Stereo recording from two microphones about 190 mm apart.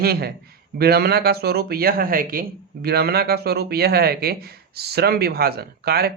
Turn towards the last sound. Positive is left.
turn(degrees=-55)  # may be behind; listen again after turning